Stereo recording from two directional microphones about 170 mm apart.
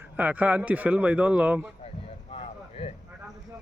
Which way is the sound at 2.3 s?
35° left (ahead or behind).